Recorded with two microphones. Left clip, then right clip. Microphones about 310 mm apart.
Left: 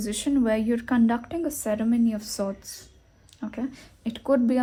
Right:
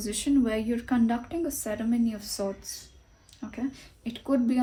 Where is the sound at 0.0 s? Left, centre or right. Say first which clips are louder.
Left 1 dB; left.